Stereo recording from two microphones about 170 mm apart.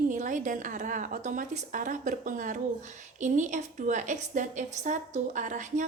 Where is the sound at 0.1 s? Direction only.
50° right (ahead or behind).